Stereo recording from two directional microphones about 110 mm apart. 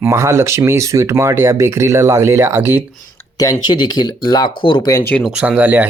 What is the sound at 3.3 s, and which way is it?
Speech, 35° left (ahead or behind).